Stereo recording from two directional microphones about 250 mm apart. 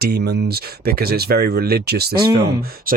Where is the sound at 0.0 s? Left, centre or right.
Right.